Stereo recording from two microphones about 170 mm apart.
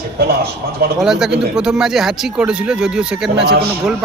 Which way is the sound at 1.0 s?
Centre (ahead or behind).